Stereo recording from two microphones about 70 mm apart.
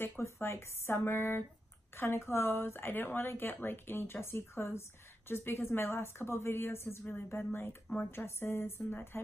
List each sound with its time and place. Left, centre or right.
0.2 s a woman's voice: left